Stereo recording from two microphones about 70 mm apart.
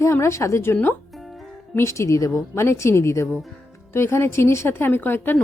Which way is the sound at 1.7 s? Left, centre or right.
Left.